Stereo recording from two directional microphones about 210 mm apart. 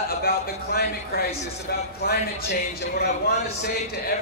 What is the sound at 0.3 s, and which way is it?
Speech, 45° left (ahead or behind).